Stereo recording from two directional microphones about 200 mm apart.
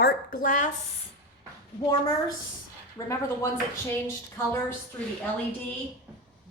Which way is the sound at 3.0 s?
15° left (ahead or behind).